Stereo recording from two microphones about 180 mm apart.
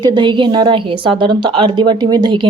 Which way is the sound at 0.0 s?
25° right (ahead or behind).